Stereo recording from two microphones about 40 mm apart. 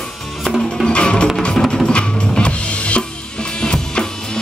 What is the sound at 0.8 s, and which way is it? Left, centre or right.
Music, left.